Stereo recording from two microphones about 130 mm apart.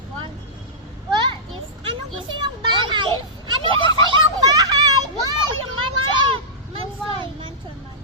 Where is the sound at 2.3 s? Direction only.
35° right (ahead or behind).